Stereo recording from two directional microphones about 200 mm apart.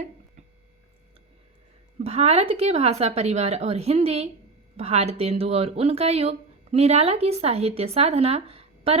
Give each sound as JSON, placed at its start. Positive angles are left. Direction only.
{"t": 2.0, "sound": "speech", "side_deg": -30}